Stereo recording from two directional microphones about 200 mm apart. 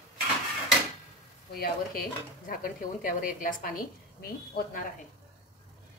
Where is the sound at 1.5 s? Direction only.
45° left (ahead or behind).